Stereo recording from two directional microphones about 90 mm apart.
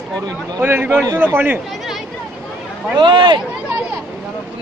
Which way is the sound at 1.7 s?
Centre (ahead or behind).